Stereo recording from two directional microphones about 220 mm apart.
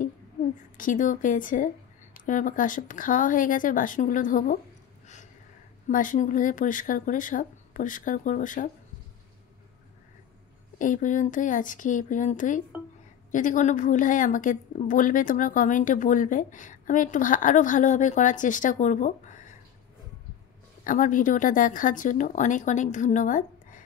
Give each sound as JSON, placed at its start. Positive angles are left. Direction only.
{"t": 0.7, "sound": "a woman's voice", "side_deg": 35}
{"t": 5.9, "sound": "a woman's voice", "side_deg": 35}
{"t": 10.8, "sound": "a woman's voice", "side_deg": 35}
{"t": 20.8, "sound": "a woman's voice", "side_deg": 40}